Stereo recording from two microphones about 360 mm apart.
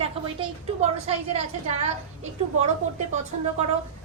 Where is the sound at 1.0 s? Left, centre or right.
Centre.